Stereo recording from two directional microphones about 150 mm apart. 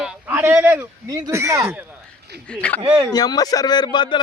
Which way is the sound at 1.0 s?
20° right (ahead or behind).